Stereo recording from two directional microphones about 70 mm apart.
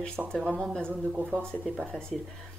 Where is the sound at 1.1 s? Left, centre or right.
Centre.